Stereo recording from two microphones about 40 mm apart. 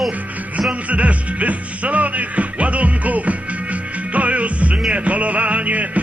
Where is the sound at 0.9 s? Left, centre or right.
Right.